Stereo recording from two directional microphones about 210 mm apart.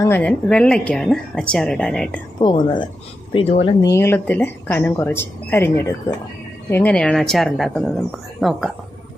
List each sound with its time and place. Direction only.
0.0 s a woman's voice: 10° left (ahead or behind)
2.4 s a woman's voice: 25° left (ahead or behind); by 8.7 s centre (ahead or behind)